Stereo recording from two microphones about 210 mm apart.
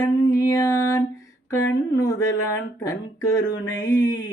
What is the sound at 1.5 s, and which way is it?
Speech, 15° left (ahead or behind).